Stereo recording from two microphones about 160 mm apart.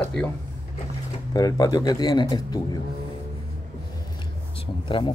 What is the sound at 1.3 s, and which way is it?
Speech, 25° left (ahead or behind).